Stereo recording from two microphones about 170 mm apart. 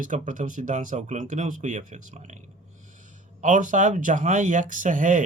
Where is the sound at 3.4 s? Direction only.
45° right (ahead or behind).